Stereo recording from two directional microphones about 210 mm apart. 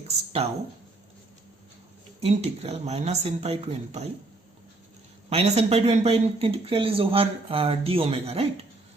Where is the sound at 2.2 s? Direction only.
30° right (ahead or behind).